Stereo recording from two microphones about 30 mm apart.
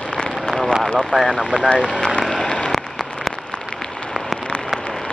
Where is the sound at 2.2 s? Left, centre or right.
Left.